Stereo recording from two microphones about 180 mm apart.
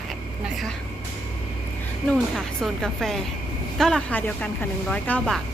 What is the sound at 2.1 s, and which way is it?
A woman's voice, 5° left (ahead or behind).